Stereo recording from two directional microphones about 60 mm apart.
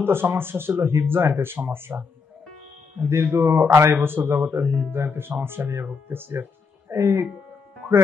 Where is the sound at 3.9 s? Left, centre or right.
Right.